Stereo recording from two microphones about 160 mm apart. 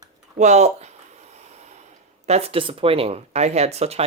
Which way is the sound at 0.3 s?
45° right (ahead or behind).